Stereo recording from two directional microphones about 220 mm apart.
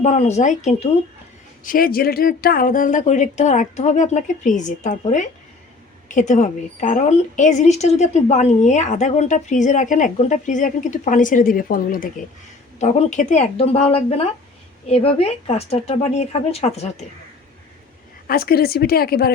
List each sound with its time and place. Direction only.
0.0 s speech: 30° left (ahead or behind)
1.6 s a woman's voice: 40° left (ahead or behind)
18.3 s speech: 45° left (ahead or behind)